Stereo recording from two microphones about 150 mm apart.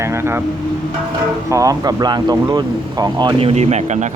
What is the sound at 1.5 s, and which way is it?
Speech, 25° right (ahead or behind).